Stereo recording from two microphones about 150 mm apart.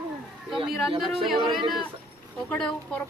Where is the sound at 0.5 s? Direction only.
Centre (ahead or behind).